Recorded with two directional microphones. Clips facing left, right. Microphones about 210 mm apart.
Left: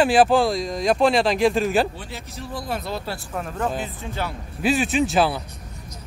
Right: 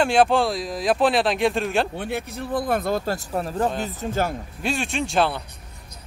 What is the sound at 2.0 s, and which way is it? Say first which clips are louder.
Speech: right 7 dB; 60° right (ahead or behind).